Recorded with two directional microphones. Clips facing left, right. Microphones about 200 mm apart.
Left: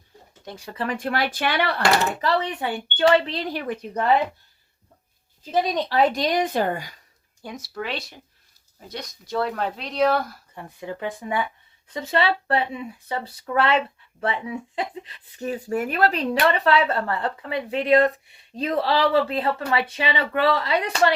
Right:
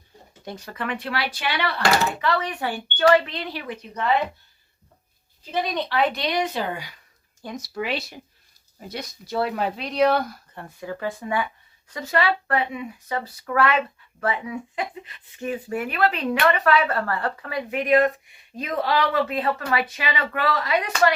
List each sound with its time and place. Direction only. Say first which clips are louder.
0.5 s speech: left 1 dB; 10° left (ahead or behind)
0.8 s a woman's voice: left 3 dB; 40° left (ahead or behind)
2.2 s speech: left 1 dB; 30° left (ahead or behind)
2.5 s speech: left 1 dB; 20° left (ahead or behind)
3.5 s a woman's voice: left 5 dB; 50° left (ahead or behind)
5.5 s a woman's voice: left 3 dB; 40° left (ahead or behind)
7.4 s speech: right 2 dB; 10° left (ahead or behind)
7.7 s speech: right 3 dB; 5° right (ahead or behind)
10.5 s speech: even; 15° left (ahead or behind)